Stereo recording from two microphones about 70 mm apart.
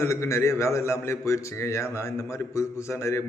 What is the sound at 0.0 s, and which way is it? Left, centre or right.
A man's voice, left.